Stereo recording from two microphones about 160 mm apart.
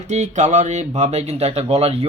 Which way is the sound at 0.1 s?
45° right (ahead or behind).